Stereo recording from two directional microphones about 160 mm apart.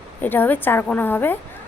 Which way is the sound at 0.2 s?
10° left (ahead or behind).